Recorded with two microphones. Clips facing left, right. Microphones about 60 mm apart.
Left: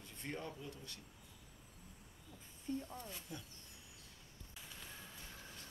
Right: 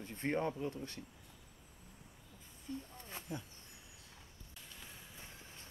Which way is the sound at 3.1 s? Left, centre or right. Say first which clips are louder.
Right 5 dB; right.